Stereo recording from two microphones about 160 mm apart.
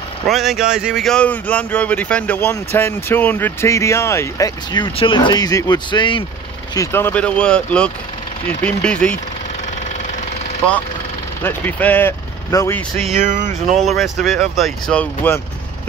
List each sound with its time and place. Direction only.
0.3 s speech: centre (ahead or behind); by 4.8 s 20° left (ahead or behind)
4.8 s speech: 30° left (ahead or behind)
6.7 s speech: 15° left (ahead or behind)
11.4 s speech: 10° left (ahead or behind)
13.2 s music: 50° right (ahead or behind)
13.8 s speech: centre (ahead or behind)